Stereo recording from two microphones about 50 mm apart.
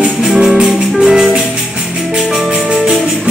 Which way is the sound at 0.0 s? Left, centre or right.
Centre.